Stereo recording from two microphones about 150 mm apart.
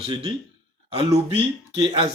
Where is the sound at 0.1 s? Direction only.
35° right (ahead or behind).